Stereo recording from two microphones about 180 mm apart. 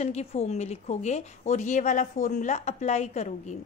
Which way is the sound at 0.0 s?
35° left (ahead or behind).